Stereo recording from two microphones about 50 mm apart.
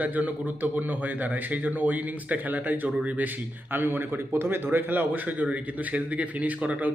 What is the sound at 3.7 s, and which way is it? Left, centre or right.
Speech, right.